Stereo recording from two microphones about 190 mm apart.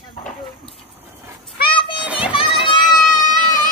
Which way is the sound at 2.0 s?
5° right (ahead or behind).